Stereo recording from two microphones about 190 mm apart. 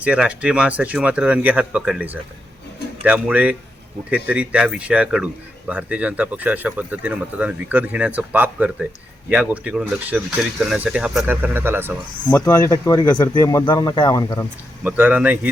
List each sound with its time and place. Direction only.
0.0 s speech: 5° right (ahead or behind)
12.3 s speech: 15° left (ahead or behind)
14.8 s speech: 10° right (ahead or behind)